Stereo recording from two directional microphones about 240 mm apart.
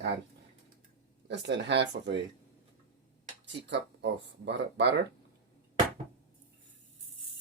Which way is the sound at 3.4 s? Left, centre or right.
Right.